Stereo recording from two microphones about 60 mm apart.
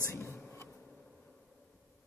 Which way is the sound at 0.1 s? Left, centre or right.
Left.